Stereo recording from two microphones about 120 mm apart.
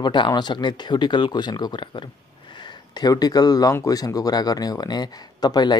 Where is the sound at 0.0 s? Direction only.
40° left (ahead or behind).